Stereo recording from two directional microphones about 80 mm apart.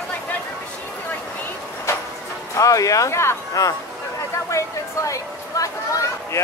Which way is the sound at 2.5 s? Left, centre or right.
Left.